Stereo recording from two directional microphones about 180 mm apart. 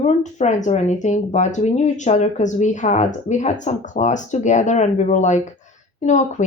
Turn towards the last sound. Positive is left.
turn(degrees=40)  # may be behind; listen again after turning